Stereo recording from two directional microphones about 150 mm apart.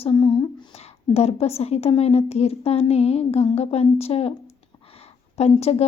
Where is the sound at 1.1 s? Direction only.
45° left (ahead or behind).